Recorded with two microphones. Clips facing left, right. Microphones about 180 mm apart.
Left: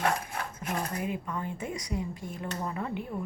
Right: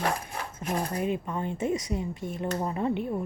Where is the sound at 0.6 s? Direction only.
30° right (ahead or behind).